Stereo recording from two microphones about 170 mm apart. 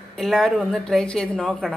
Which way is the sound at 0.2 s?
Centre (ahead or behind).